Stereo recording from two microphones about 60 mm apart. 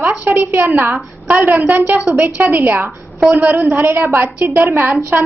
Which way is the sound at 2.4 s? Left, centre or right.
Right.